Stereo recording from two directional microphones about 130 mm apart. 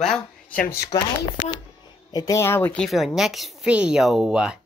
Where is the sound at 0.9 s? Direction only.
25° left (ahead or behind).